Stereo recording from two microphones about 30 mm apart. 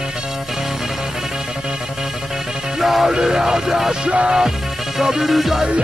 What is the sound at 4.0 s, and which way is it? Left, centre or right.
Music, right.